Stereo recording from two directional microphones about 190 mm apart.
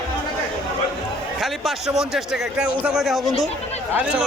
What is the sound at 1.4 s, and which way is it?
A man's voice, centre (ahead or behind).